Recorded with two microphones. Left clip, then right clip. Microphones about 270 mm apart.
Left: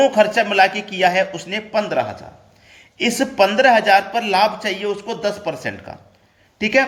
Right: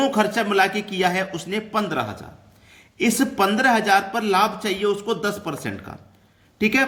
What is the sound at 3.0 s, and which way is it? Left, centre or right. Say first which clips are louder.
Speech: left 4 dB; centre.